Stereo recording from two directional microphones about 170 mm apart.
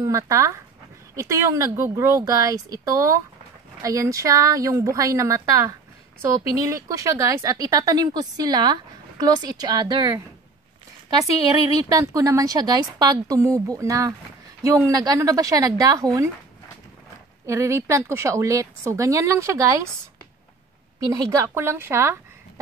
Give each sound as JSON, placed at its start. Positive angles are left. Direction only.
{"t": 0.0, "sound": "a woman's voice", "side_deg": -20}
{"t": 11.9, "sound": "speech", "side_deg": -20}
{"t": 17.5, "sound": "a woman's voice", "side_deg": -15}
{"t": 21.0, "sound": "a woman's voice", "side_deg": -20}